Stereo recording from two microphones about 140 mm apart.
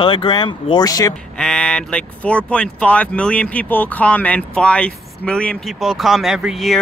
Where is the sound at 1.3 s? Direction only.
5° left (ahead or behind).